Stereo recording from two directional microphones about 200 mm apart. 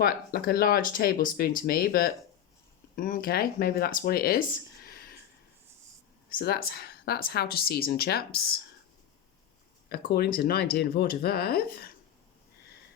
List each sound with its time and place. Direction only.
0.0 s speech: 50° left (ahead or behind)
6.3 s speech: 50° left (ahead or behind)
10.0 s speech: 50° left (ahead or behind)